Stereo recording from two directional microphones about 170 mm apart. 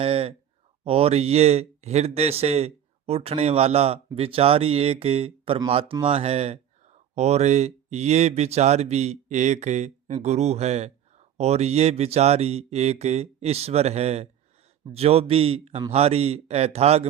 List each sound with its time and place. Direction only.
0.0 s a man's voice: 35° right (ahead or behind)